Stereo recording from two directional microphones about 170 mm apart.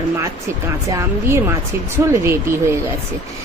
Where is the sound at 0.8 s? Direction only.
15° right (ahead or behind).